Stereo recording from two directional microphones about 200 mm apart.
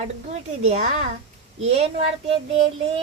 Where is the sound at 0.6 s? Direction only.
35° right (ahead or behind).